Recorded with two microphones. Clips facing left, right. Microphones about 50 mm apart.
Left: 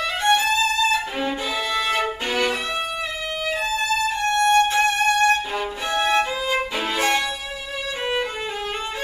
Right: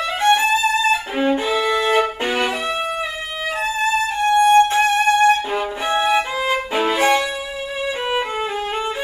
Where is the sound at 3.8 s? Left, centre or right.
Centre.